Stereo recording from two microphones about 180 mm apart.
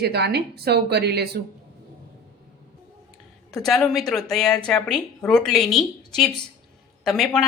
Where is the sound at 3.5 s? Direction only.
Centre (ahead or behind).